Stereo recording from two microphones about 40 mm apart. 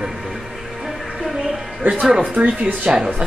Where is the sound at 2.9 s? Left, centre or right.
Right.